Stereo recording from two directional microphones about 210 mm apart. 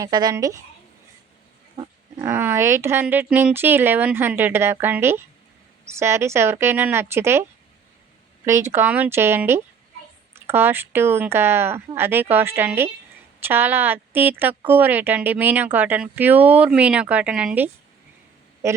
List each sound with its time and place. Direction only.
0.0 s speech: 20° right (ahead or behind)
1.7 s speech: 20° right (ahead or behind)
8.4 s a man's voice: 15° right (ahead or behind)